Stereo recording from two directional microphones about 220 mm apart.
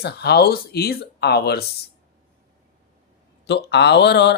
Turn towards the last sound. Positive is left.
turn(degrees=50)  # may be behind; listen again after turning